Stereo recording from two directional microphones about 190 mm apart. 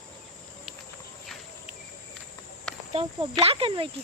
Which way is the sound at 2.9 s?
30° right (ahead or behind).